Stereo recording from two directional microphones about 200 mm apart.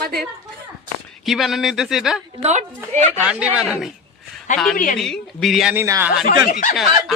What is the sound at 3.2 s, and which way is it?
Speech, 5° right (ahead or behind).